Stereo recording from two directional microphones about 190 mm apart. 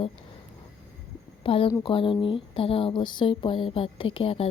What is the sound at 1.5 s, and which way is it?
Speech, 30° left (ahead or behind).